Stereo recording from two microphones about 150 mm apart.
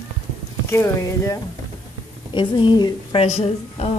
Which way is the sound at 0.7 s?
20° left (ahead or behind).